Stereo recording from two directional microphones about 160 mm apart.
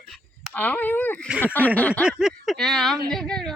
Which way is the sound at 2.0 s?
Centre (ahead or behind).